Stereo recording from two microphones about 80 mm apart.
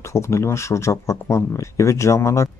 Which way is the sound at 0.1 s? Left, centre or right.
Left.